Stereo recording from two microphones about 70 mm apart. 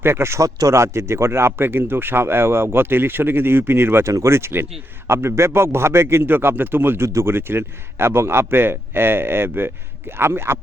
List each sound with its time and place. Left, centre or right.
0.0 s a man's voice: right
4.0 s a man's voice: right